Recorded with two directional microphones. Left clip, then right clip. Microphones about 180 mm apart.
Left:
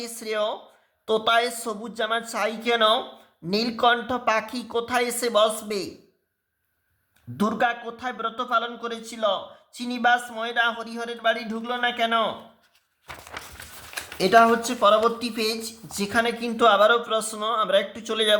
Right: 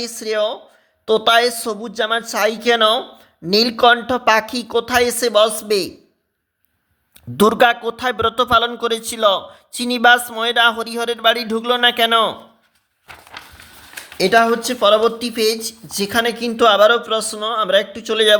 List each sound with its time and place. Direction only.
0.0 s speech: 25° right (ahead or behind)
7.1 s a man's voice: 50° right (ahead or behind)
14.2 s speech: 35° right (ahead or behind)